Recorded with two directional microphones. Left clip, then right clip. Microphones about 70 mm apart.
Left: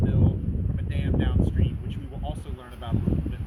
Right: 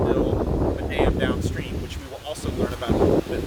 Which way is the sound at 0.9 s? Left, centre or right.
Right.